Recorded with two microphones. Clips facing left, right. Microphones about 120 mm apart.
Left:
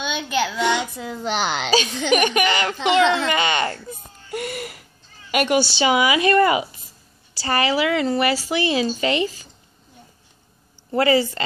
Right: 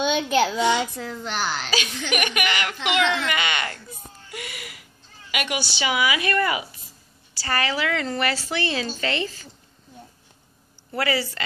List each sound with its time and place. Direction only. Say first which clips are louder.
0.3 s a child's voice: even; 40° right (ahead or behind)
0.6 s a child's voice: even; 65° left (ahead or behind)
0.9 s a woman's voice: left 4 dB; 20° left (ahead or behind)
4.3 s wheeze: left 10 dB; 45° left (ahead or behind)
5.3 s a woman's voice: left 9 dB; 40° left (ahead or behind); by 9.5 s 15° left (ahead or behind)
10.9 s a woman's voice: left 7 dB; 25° left (ahead or behind)